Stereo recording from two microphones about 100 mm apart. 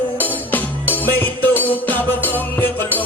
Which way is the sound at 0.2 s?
15° left (ahead or behind).